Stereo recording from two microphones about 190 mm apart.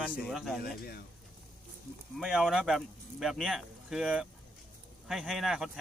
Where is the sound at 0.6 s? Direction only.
55° left (ahead or behind).